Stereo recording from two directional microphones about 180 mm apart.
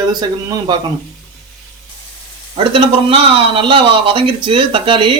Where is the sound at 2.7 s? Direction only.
30° right (ahead or behind).